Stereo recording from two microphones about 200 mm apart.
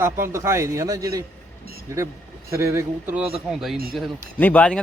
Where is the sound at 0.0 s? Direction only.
15° right (ahead or behind).